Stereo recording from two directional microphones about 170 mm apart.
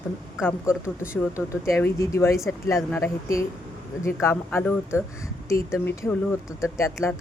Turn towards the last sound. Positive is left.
turn(degrees=15)  # may be behind; listen again after turning